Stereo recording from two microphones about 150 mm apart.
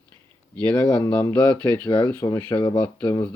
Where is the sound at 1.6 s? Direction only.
10° left (ahead or behind).